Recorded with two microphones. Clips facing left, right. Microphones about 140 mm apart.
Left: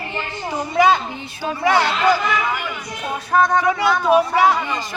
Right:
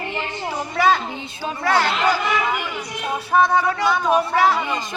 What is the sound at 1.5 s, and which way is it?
Speech, 10° left (ahead or behind).